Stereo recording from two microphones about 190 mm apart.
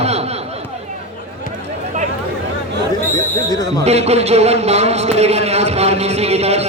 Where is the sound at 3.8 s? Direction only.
35° right (ahead or behind).